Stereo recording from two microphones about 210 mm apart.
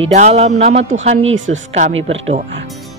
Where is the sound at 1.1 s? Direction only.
65° right (ahead or behind).